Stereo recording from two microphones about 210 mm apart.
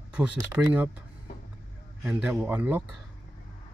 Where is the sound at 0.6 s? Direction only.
10° right (ahead or behind).